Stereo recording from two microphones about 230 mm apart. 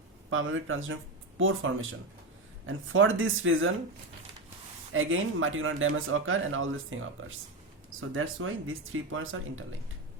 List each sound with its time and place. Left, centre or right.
0.3 s speech: right
4.9 s speech: right
8.1 s speech: right